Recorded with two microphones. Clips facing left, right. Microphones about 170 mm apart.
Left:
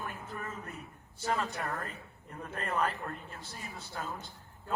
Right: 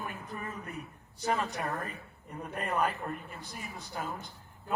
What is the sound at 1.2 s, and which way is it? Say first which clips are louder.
A man's voice: right 2 dB; 15° right (ahead or behind).